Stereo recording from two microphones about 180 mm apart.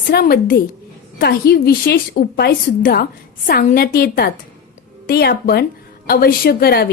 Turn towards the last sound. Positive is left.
turn(degrees=60)  # may be behind; listen again after turning